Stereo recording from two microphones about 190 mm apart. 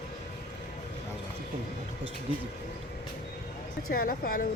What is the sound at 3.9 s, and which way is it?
Speech, 50° left (ahead or behind).